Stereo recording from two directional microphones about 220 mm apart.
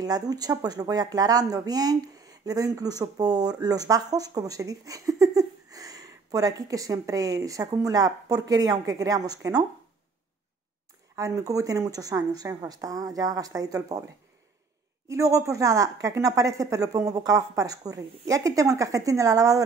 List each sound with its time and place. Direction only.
0.0 s speech: 15° right (ahead or behind)
11.1 s speech: 15° right (ahead or behind)
15.0 s speech: 15° right (ahead or behind)